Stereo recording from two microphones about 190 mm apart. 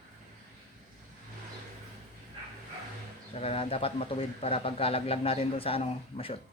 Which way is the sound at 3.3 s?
30° left (ahead or behind).